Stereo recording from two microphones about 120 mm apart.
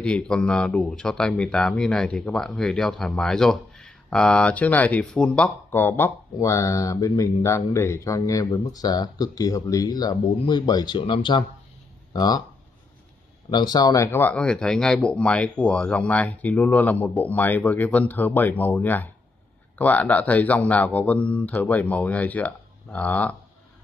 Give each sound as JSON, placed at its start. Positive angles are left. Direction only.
{"t": 0.0, "sound": "speech", "side_deg": 10}
{"t": 5.7, "sound": "speech", "side_deg": 20}
{"t": 13.5, "sound": "speech", "side_deg": 35}